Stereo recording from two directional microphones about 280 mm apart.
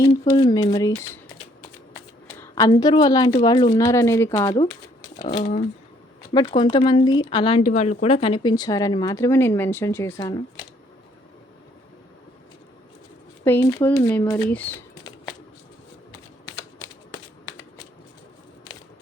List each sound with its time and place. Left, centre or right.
0.0 s speech: centre
2.4 s speech: centre
5.3 s speech: left
13.4 s speech: centre